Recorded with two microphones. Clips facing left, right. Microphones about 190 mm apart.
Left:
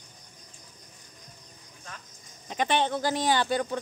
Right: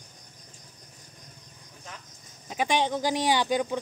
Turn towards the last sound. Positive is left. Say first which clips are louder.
# right 1 dB
turn(degrees=-15)  # may be behind; listen again after turning